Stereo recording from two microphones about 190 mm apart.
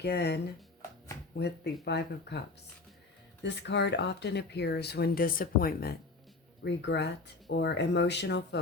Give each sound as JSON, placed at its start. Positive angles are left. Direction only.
{"t": 0.0, "sound": "speech", "side_deg": 60}
{"t": 3.4, "sound": "speech", "side_deg": 65}
{"t": 6.7, "sound": "speech", "side_deg": 65}